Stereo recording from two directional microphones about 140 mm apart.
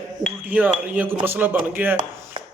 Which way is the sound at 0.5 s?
10° right (ahead or behind).